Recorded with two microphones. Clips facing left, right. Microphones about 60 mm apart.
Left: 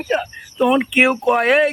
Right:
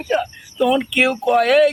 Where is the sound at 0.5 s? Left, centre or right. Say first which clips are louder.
Left 2 dB; left.